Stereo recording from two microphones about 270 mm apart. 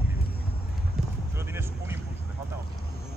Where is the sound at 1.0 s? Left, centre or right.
Centre.